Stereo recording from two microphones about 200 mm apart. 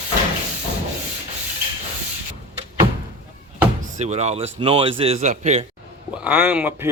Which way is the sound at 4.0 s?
35° right (ahead or behind).